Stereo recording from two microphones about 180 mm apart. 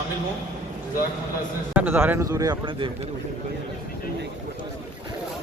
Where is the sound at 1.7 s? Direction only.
10° right (ahead or behind); by 2.9 s 25° right (ahead or behind).